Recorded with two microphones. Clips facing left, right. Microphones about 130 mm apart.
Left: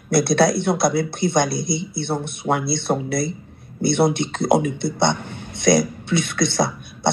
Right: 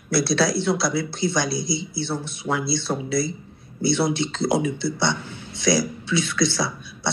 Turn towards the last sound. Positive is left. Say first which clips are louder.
# left 6 dB
turn(degrees=55)  # may be behind; listen again after turning